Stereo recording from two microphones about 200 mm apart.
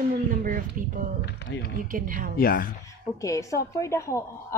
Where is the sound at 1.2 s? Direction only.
55° left (ahead or behind).